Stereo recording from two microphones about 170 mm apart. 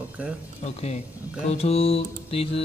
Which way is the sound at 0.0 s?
5° right (ahead or behind).